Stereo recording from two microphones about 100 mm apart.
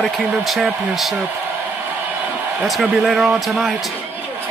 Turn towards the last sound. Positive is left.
turn(degrees=-5)  # may be behind; listen again after turning